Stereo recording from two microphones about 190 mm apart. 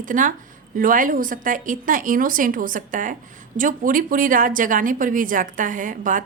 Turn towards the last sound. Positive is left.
turn(degrees=-45)  # may be behind; listen again after turning